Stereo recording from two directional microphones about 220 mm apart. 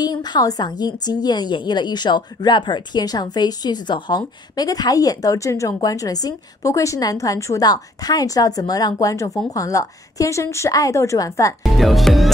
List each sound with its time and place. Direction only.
0.0 s a woman's voice: 20° left (ahead or behind)
11.6 s speech: centre (ahead or behind)